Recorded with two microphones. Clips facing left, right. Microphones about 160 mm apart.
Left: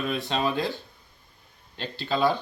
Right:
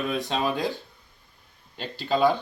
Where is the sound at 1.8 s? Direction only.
10° right (ahead or behind).